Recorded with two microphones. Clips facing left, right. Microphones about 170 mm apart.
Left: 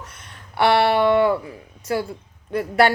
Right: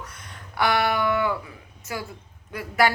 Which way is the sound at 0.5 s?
30° left (ahead or behind).